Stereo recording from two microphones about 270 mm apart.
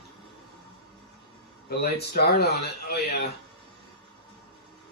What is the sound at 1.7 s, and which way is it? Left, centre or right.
Speech, left.